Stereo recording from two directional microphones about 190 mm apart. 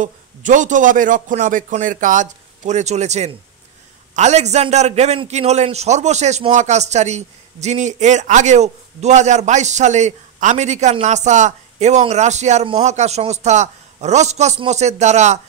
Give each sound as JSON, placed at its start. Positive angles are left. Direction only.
{"t": 0.0, "sound": "a man's voice", "side_deg": -40}